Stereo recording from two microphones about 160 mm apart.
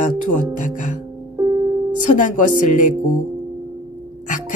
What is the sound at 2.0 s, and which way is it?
Speech, 50° left (ahead or behind).